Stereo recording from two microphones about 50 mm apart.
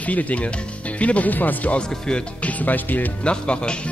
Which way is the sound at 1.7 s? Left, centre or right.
Centre.